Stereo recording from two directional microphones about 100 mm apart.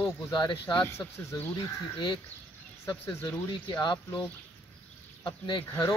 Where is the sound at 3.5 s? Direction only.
50° left (ahead or behind).